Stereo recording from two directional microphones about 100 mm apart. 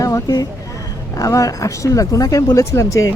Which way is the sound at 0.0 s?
35° left (ahead or behind).